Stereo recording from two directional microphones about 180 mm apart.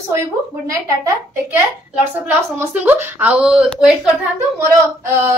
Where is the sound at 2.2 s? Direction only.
10° right (ahead or behind).